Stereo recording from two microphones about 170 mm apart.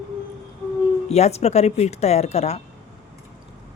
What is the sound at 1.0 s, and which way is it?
Speech, 40° left (ahead or behind).